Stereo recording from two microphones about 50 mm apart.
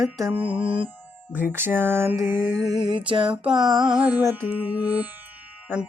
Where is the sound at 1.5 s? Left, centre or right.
Right.